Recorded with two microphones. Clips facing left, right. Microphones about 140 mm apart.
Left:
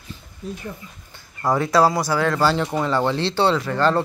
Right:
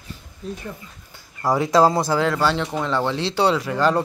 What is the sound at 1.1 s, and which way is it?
Speech, 10° right (ahead or behind).